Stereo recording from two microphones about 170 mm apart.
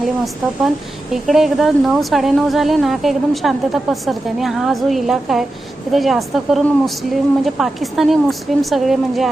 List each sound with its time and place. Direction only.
1.1 s a woman's voice: centre (ahead or behind)